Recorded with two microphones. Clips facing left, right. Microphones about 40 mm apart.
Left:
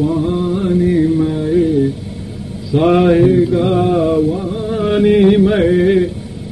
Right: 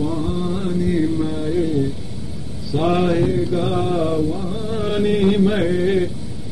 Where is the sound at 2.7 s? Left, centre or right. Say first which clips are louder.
Left 7 dB; left.